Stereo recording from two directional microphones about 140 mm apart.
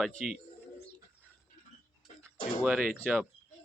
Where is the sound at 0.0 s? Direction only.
Centre (ahead or behind).